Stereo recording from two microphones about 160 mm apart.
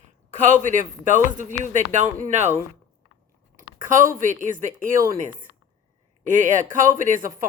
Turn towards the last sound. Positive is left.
turn(degrees=-60)  # may be behind; listen again after turning